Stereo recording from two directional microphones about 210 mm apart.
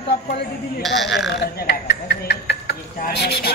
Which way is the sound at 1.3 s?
50° left (ahead or behind).